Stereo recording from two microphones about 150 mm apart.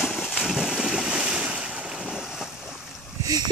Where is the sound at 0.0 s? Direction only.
Centre (ahead or behind).